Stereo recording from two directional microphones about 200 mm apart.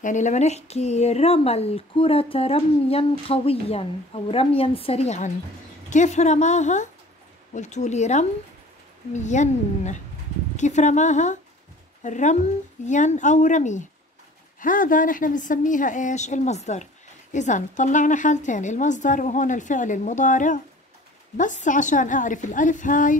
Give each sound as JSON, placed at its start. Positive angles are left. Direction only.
{"t": 0.0, "sound": "a woman's voice", "side_deg": 40}